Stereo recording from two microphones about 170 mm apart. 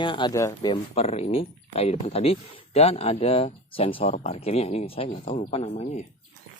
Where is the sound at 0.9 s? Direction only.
40° left (ahead or behind).